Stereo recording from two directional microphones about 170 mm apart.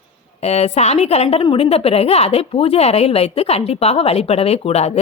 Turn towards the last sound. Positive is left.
turn(degrees=40)  # may be behind; listen again after turning